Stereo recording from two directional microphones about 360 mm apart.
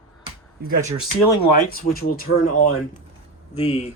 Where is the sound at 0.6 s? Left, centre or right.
Right.